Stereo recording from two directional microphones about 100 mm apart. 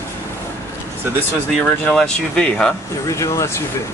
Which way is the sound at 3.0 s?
35° left (ahead or behind).